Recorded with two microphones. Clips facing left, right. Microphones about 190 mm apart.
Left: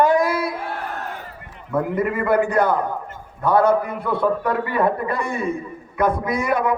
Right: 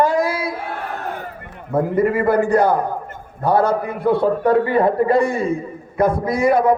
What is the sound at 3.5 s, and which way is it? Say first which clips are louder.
Speech: left 1 dB; 55° left (ahead or behind).